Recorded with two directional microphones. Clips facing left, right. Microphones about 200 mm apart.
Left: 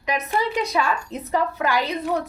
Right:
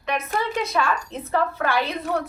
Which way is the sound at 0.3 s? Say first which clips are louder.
Left 2 dB; 15° left (ahead or behind).